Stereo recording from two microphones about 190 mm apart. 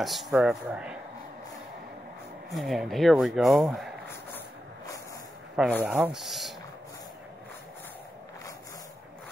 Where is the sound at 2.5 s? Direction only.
Centre (ahead or behind).